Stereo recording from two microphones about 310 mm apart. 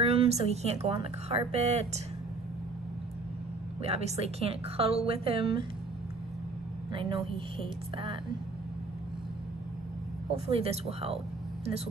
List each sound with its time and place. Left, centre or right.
0.0 s a woman's voice: centre
3.8 s a woman's voice: centre
6.9 s a woman's voice: centre
10.3 s a woman's voice: centre